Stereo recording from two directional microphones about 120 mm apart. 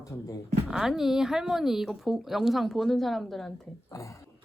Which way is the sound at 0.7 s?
5° right (ahead or behind).